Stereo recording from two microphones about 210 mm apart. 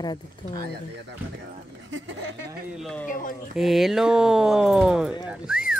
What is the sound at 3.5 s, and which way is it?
Speech, centre (ahead or behind).